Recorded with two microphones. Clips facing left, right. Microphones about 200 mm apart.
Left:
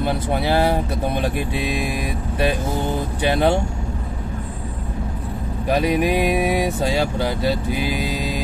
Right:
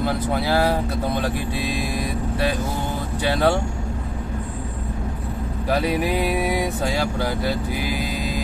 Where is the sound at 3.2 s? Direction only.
20° left (ahead or behind).